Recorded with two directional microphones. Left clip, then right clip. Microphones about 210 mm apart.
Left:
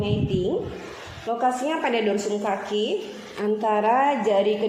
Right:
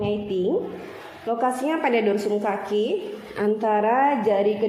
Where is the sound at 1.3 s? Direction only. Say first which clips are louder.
Even; 25° right (ahead or behind).